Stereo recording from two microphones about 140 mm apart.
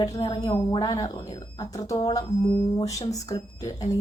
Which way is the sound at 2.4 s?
40° left (ahead or behind).